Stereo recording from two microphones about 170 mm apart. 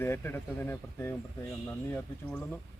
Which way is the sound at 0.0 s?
15° left (ahead or behind).